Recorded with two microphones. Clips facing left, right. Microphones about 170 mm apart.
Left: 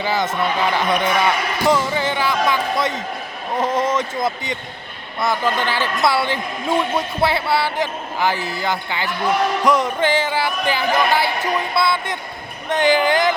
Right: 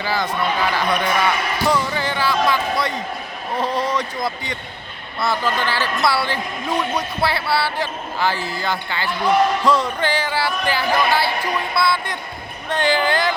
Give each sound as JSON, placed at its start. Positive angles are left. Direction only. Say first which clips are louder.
{"t": 0.0, "sound": "speech", "louder": "left 2 dB", "side_deg": 20}
{"t": 1.6, "sound": "basketball bounce", "louder": "left 3 dB", "side_deg": 20}
{"t": 3.5, "sound": "speech", "louder": "left 2 dB", "side_deg": 20}